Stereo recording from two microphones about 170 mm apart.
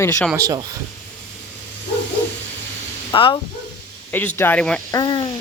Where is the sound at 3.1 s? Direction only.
30° left (ahead or behind).